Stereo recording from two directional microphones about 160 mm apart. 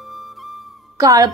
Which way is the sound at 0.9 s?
20° right (ahead or behind).